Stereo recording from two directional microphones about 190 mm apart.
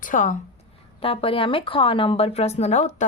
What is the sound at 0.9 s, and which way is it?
A woman's voice, 30° left (ahead or behind).